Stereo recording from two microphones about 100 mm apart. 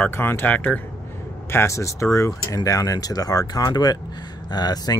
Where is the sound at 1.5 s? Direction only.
30° left (ahead or behind).